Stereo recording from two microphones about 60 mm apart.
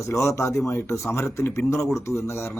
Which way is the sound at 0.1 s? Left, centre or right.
Left.